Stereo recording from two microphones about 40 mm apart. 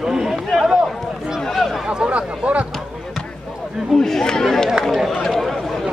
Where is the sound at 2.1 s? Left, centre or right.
Right.